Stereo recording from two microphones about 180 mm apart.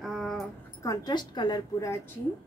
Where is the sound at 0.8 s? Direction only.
20° left (ahead or behind).